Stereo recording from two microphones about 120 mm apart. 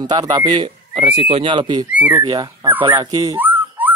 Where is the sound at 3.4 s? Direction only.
15° right (ahead or behind).